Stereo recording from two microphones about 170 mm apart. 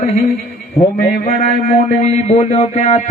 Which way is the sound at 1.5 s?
50° left (ahead or behind).